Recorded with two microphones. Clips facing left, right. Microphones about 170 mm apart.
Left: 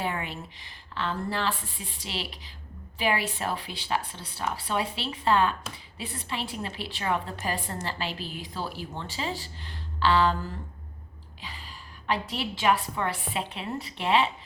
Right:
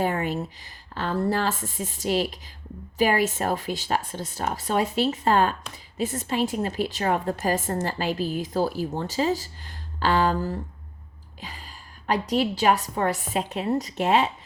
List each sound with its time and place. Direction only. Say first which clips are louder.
0.0 s a woman's voice: right 7 dB; 45° right (ahead or behind)